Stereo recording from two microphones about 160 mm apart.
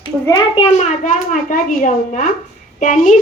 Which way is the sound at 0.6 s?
45° left (ahead or behind).